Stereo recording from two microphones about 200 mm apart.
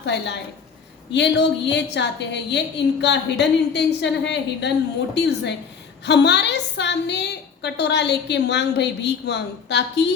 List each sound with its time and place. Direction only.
0.0 s a woman's voice: 60° left (ahead or behind)